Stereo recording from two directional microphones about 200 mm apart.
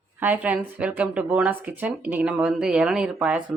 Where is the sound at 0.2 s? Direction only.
10° right (ahead or behind).